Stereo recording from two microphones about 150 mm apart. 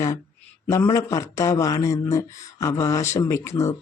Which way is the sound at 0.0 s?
20° left (ahead or behind).